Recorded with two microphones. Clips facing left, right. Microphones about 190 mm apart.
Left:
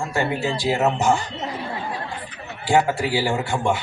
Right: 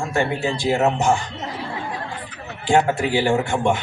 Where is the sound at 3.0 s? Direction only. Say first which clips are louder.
Right 3 dB; 20° right (ahead or behind).